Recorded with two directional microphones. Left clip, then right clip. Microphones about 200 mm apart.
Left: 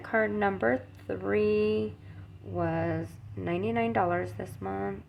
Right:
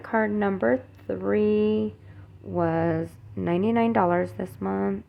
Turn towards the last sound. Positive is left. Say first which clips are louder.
# right 6 dB
turn(degrees=-35)  # may be behind; listen again after turning